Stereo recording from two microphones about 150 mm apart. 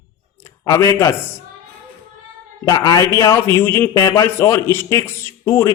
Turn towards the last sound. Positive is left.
turn(degrees=15)  # may be behind; listen again after turning